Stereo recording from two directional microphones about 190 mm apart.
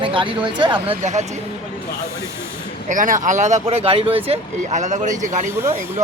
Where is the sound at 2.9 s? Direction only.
40° right (ahead or behind).